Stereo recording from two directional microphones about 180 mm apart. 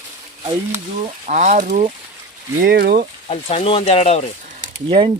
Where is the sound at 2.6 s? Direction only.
60° right (ahead or behind).